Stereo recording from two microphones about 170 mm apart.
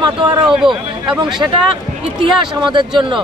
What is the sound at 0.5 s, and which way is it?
Speech, 5° right (ahead or behind).